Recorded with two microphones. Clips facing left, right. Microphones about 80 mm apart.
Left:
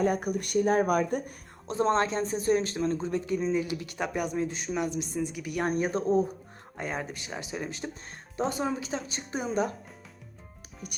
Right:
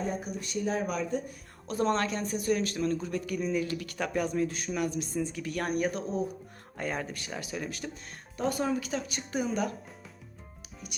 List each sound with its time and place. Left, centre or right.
0.0 s speech: left
1.6 s speech: left
5.6 s speech: left
6.7 s speech: centre